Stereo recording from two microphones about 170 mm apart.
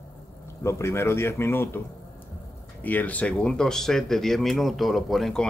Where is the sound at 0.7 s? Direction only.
15° left (ahead or behind).